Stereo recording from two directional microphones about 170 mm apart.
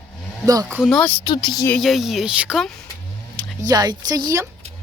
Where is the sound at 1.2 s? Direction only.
25° left (ahead or behind).